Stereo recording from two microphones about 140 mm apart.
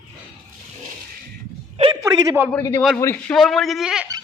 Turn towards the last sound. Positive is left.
turn(degrees=-5)  # may be behind; listen again after turning